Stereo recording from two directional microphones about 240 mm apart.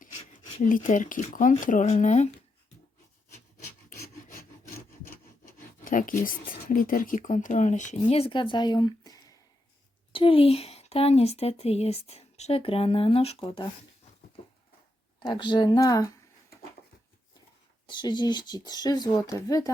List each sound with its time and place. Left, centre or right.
0.4 s speech: left
5.0 s speech: left
15.2 s speech: centre
17.8 s speech: centre